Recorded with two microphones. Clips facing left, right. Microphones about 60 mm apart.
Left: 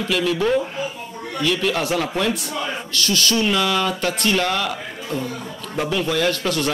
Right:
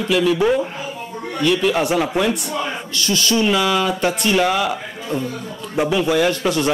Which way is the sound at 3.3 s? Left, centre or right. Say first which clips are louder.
Right 4 dB; centre.